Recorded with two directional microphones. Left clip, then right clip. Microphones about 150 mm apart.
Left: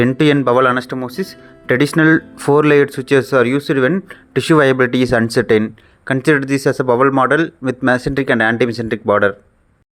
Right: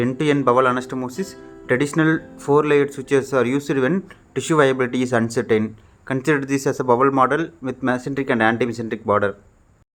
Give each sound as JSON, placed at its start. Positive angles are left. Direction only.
{"t": 0.1, "sound": "speech", "side_deg": 35}